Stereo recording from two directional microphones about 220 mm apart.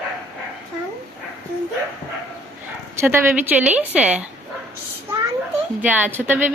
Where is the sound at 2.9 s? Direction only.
10° right (ahead or behind).